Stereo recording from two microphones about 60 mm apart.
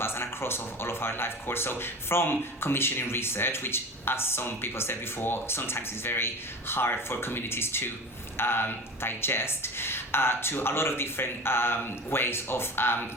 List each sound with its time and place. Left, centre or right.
0.0 s speech: left